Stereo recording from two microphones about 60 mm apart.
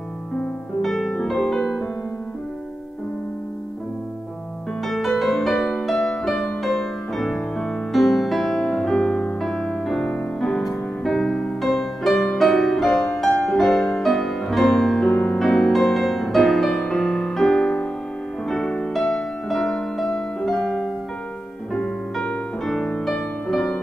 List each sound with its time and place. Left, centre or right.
0.8 s music: centre
4.8 s music: centre
18.5 s music: centre
21.7 s piano: centre
23.0 s music: centre